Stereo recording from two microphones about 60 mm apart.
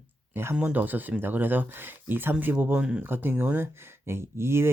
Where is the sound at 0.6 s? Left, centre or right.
Right.